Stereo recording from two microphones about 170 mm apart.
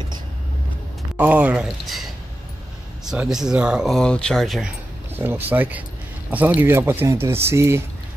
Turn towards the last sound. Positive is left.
turn(degrees=-15)  # may be behind; listen again after turning